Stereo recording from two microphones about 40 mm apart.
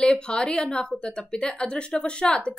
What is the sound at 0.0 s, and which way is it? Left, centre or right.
A woman's voice, left.